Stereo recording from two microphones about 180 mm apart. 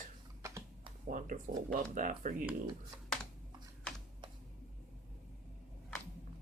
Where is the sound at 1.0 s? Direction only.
50° right (ahead or behind).